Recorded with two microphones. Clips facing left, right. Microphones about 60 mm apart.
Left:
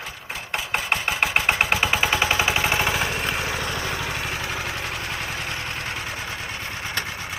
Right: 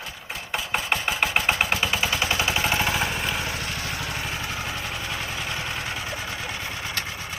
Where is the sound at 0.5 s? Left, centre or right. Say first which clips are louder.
Left 1 dB; centre.